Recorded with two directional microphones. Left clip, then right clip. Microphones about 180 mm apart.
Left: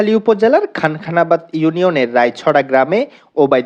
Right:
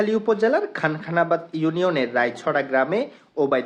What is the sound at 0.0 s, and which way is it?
Speech, 35° left (ahead or behind).